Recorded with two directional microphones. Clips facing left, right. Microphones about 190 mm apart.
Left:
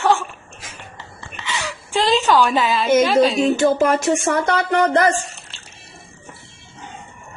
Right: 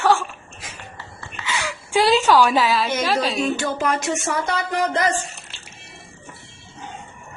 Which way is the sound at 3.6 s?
50° left (ahead or behind).